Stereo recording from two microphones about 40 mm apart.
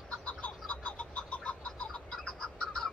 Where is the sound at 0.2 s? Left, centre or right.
Left.